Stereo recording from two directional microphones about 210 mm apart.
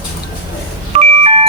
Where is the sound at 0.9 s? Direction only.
30° right (ahead or behind).